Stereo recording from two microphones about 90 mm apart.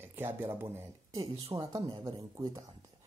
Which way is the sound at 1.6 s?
45° right (ahead or behind).